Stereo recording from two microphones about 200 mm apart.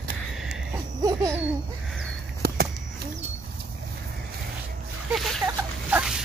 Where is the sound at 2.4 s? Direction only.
55° right (ahead or behind).